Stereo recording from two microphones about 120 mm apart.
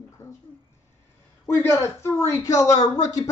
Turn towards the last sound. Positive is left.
turn(degrees=30)  # may be behind; listen again after turning